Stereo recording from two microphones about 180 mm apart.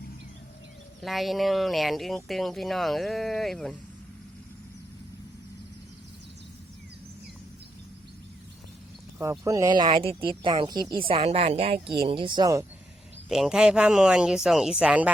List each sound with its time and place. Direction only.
1.0 s speech: centre (ahead or behind)
9.1 s speech: 10° right (ahead or behind)
13.2 s speech: centre (ahead or behind)